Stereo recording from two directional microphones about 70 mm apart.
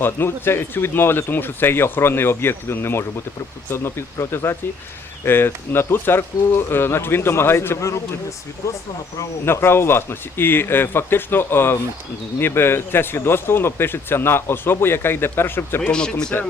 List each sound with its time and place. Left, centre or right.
0.0 s speech: left
9.5 s speech: left
15.8 s speech: centre